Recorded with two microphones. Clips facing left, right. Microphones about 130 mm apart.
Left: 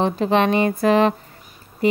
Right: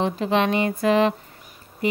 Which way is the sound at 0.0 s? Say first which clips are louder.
Left 3 dB; 45° left (ahead or behind).